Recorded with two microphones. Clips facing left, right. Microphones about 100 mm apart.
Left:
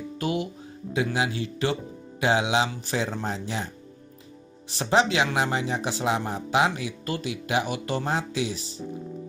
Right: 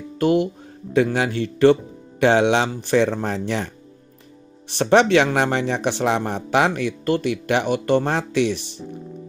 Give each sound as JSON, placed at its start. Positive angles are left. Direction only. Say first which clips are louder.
{"t": 0.2, "sound": "music", "louder": "right 10 dB", "side_deg": -55}
{"t": 0.9, "sound": "speech", "louder": "right 7 dB", "side_deg": -55}